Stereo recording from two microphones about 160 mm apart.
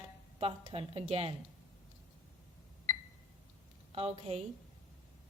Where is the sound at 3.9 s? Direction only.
40° right (ahead or behind).